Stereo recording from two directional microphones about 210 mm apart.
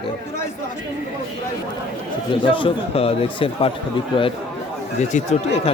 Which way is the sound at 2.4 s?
25° left (ahead or behind).